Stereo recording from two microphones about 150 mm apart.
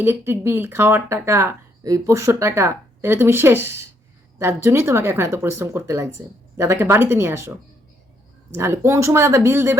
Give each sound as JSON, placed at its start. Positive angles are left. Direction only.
{"t": 0.0, "sound": "speech", "side_deg": -15}
{"t": 8.5, "sound": "speech", "side_deg": -15}